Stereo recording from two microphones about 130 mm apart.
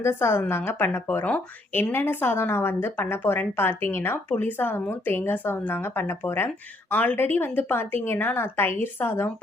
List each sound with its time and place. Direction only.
0.0 s a woman's voice: 20° left (ahead or behind)